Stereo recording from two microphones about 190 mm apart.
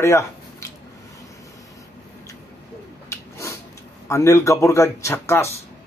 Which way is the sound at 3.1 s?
15° left (ahead or behind).